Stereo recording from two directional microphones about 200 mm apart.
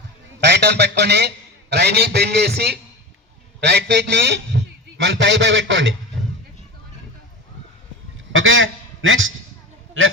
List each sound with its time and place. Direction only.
0.3 s a man's voice: 60° right (ahead or behind)
8.3 s a man's voice: 75° right (ahead or behind)